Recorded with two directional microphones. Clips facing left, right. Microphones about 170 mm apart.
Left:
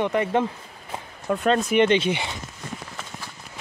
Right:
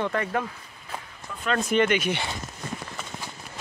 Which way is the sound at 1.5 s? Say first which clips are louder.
Left 2 dB; 25° left (ahead or behind).